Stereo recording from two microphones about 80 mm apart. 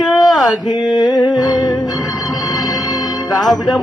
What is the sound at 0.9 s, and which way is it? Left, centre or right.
Humming, left.